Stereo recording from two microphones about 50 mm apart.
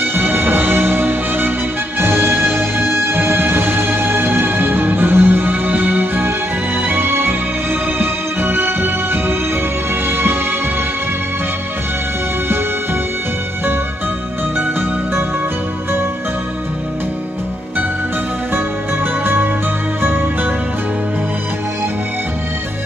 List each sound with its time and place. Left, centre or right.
0.0 s music: right
14.6 s music: right
19.2 s music: right